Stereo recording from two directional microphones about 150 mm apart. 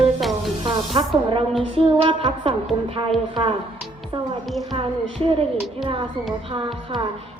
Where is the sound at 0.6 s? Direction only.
35° right (ahead or behind).